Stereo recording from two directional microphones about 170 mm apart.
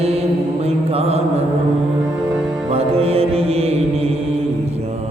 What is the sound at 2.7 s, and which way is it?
Music, 35° right (ahead or behind).